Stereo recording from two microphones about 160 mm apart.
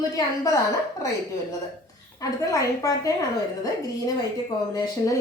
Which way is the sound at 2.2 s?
20° left (ahead or behind).